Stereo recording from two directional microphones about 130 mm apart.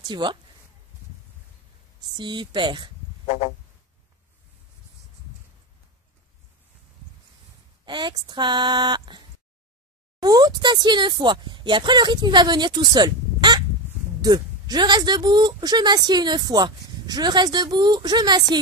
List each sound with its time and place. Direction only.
0.0 s speech: 35° right (ahead or behind)
2.1 s a woman's voice: 35° right (ahead or behind)
3.3 s a sound: 55° left (ahead or behind)
7.8 s a woman's voice: 35° right (ahead or behind)
10.2 s a woman's voice: 30° right (ahead or behind)